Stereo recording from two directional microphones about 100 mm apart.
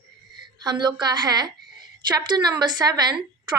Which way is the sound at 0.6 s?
45° right (ahead or behind).